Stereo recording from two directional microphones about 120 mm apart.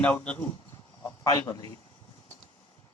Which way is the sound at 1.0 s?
30° left (ahead or behind).